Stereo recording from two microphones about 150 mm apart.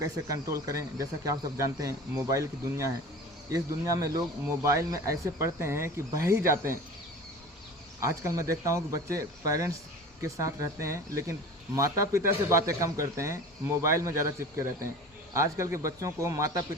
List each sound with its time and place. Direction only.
0.0 s speech: 20° right (ahead or behind)
8.0 s speech: 20° right (ahead or behind)